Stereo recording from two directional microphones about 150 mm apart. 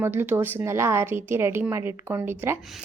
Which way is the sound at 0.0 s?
15° right (ahead or behind).